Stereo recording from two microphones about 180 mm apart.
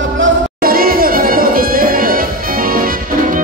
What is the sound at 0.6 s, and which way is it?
Music, 55° right (ahead or behind).